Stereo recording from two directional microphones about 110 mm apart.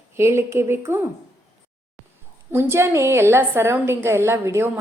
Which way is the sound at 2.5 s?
20° right (ahead or behind).